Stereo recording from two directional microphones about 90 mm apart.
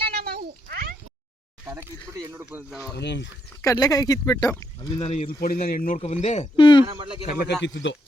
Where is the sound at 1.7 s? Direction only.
35° right (ahead or behind).